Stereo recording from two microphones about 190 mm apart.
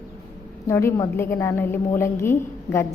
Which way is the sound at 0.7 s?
15° left (ahead or behind).